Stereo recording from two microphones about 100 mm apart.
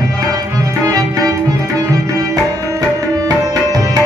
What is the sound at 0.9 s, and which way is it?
Music, 35° right (ahead or behind).